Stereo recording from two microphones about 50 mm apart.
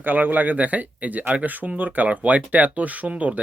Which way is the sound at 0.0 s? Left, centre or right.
Right.